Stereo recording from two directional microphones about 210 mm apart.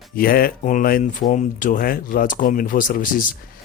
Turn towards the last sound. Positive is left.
turn(degrees=40)  # may be behind; listen again after turning